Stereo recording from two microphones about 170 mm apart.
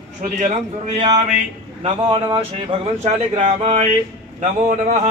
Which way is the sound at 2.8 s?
35° right (ahead or behind).